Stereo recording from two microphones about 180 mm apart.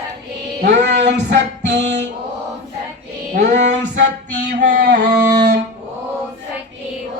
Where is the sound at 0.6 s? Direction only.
70° right (ahead or behind).